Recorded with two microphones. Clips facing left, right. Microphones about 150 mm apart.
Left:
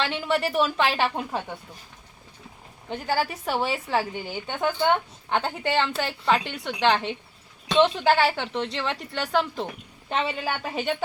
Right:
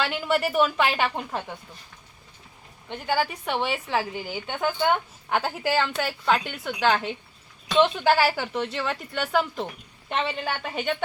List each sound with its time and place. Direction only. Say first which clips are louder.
0.0 s a woman's voice: even; centre (ahead or behind)
2.9 s a woman's voice: even; 5° left (ahead or behind)